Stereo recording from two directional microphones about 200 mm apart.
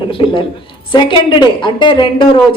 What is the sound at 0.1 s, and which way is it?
Speech, 25° left (ahead or behind).